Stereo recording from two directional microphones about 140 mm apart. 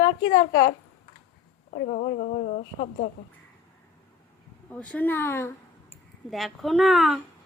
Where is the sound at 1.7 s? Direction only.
70° left (ahead or behind).